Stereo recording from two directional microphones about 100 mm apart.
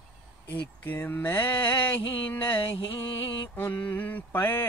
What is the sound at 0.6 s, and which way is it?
Speech, 20° left (ahead or behind).